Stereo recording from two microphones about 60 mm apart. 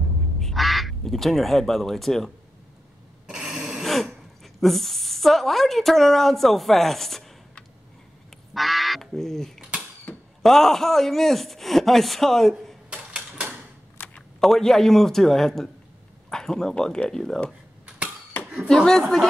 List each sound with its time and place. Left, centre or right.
0.4 s speech: centre
3.3 s a sound: centre
3.8 s a woman's voice: centre
8.5 s goose: centre
10.1 s a sound: left
10.4 s speech: centre
13.4 s typewriter: right
14.0 s a sound: left
14.4 s speech: centre
18.7 s speech: centre